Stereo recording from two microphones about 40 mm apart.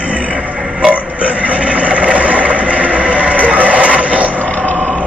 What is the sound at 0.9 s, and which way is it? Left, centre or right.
Vehicle, right.